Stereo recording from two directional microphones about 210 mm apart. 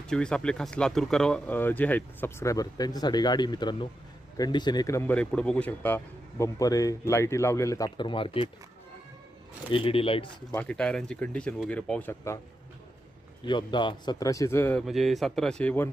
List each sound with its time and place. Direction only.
0.1 s speech: 5° left (ahead or behind); by 8.4 s 25° left (ahead or behind)
9.7 s speech: 25° left (ahead or behind)
10.5 s speech: 5° left (ahead or behind)
13.4 s speech: 20° left (ahead or behind)